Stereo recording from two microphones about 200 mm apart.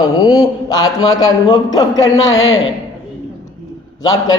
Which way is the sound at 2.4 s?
80° left.